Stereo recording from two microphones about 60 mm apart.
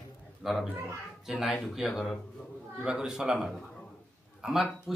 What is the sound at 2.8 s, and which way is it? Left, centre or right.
A man's voice, centre.